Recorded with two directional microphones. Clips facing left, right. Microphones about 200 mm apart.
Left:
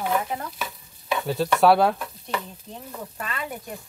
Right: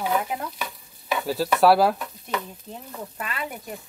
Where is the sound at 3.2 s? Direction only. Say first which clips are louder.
Right 1 dB; 5° right (ahead or behind).